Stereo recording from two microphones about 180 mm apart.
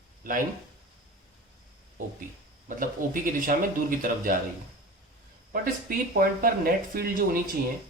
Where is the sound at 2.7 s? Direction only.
50° right (ahead or behind).